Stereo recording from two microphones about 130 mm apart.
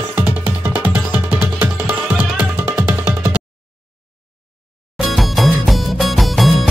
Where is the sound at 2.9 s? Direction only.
15° right (ahead or behind).